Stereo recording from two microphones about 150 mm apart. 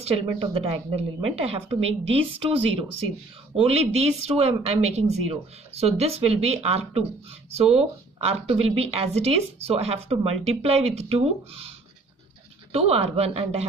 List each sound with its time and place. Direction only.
0.0 s a woman's voice: 40° right (ahead or behind)
12.7 s speech: 40° right (ahead or behind)